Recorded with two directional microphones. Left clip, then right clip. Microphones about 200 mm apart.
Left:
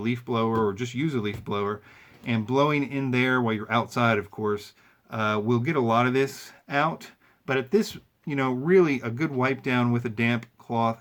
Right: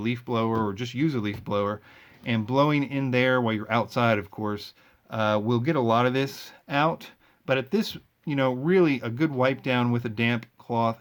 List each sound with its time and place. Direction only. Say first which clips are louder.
0.0 s speech: left 1 dB; 30° right (ahead or behind)